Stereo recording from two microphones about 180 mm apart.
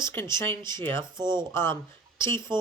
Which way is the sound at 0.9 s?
25° right (ahead or behind).